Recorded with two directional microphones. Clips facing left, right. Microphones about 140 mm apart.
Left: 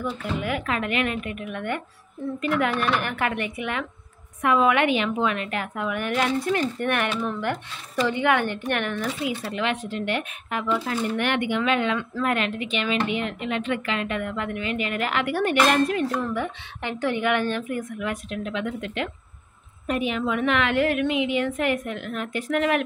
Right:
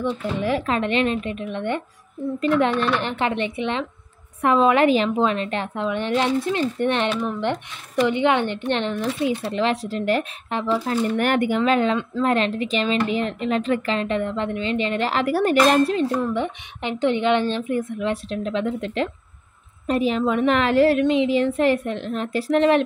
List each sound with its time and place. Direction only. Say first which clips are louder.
0.0 s a woman's voice: right 4 dB; 30° right (ahead or behind)
3.0 s a woman's voice: right 3 dB; 25° right (ahead or behind)
16.1 s a woman's voice: right 4 dB; 20° right (ahead or behind)